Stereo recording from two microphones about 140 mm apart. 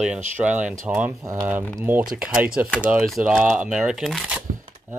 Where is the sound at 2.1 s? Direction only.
5° right (ahead or behind).